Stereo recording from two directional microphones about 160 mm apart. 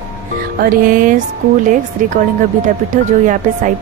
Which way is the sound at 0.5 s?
60° right (ahead or behind).